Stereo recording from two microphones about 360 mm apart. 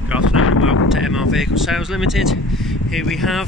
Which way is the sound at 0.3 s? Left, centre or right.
Left.